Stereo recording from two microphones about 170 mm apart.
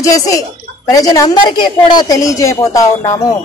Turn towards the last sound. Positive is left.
turn(degrees=20)  # may be behind; listen again after turning